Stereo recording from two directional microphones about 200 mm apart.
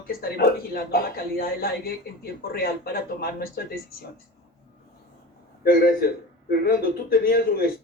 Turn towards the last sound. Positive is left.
turn(degrees=50)  # may be behind; listen again after turning